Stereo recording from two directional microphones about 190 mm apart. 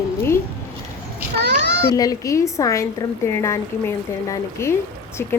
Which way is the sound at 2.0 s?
15° left (ahead or behind).